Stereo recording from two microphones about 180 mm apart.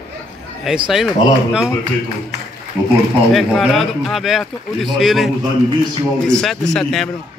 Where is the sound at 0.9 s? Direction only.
Centre (ahead or behind).